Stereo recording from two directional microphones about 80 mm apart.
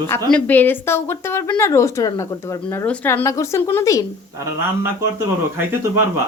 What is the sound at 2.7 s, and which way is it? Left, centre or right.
Speech, left.